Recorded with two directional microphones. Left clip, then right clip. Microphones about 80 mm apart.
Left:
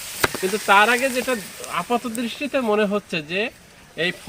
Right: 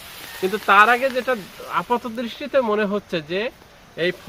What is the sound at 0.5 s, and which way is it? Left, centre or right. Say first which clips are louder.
Speech: right 2 dB; right.